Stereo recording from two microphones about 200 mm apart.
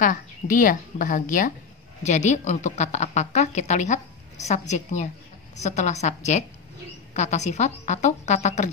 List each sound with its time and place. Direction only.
0.0 s a woman's voice: 40° left (ahead or behind)